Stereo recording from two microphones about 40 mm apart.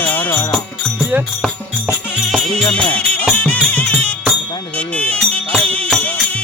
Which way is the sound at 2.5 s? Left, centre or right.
Left.